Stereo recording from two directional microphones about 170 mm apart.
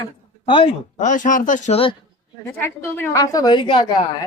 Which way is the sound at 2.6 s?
15° left (ahead or behind).